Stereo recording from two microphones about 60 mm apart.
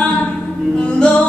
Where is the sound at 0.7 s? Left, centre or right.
Centre.